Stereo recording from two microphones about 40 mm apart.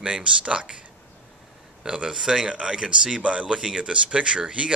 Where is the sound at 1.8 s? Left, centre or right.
Right.